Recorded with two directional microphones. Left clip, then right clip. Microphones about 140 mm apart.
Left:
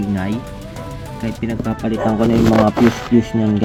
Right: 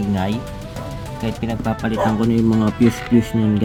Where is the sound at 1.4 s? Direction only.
45° right (ahead or behind).